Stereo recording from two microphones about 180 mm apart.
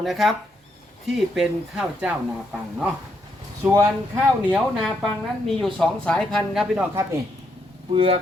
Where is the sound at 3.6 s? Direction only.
15° right (ahead or behind).